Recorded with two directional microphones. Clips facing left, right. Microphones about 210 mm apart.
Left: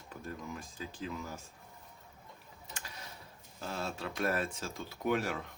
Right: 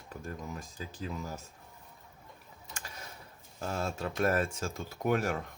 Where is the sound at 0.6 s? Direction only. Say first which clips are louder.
Right 1 dB; 40° right (ahead or behind).